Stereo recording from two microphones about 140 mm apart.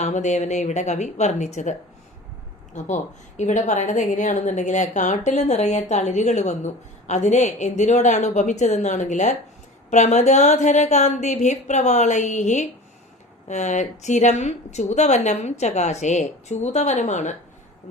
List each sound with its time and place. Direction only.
0.0 s a woman's voice: 55° left (ahead or behind)
2.7 s a woman's voice: 60° left (ahead or behind)